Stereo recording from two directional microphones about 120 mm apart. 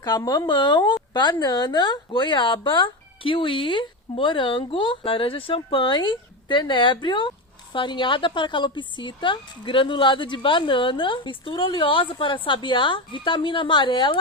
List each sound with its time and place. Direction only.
0.0 s speech: 35° left (ahead or behind)